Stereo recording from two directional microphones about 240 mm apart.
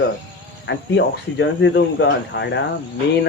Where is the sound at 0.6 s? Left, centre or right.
Left.